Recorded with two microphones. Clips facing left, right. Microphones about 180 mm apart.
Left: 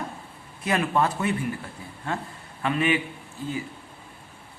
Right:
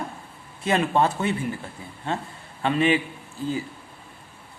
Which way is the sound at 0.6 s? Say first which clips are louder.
Right 2 dB; 25° right (ahead or behind).